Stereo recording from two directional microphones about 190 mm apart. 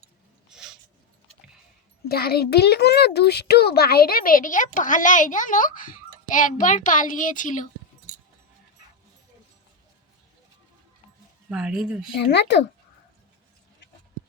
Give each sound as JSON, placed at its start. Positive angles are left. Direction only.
{"t": 0.5, "sound": "a sound", "side_deg": -5}
{"t": 2.0, "sound": "a child's voice", "side_deg": 55}
{"t": 11.4, "sound": "speech", "side_deg": -5}
{"t": 12.2, "sound": "speech", "side_deg": 65}